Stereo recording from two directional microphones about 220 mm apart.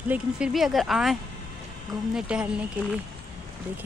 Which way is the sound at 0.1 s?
5° right (ahead or behind).